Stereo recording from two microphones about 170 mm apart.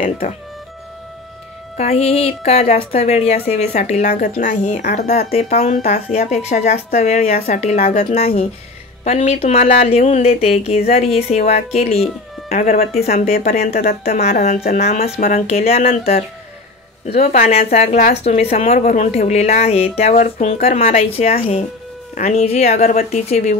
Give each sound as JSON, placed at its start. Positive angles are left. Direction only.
{"t": 0.0, "sound": "speech", "side_deg": 45}
{"t": 1.8, "sound": "a woman's voice", "side_deg": 40}
{"t": 8.2, "sound": "a woman's voice", "side_deg": 35}
{"t": 17.0, "sound": "a woman's voice", "side_deg": 40}